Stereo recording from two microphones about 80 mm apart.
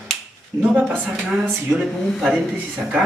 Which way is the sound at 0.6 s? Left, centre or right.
Centre.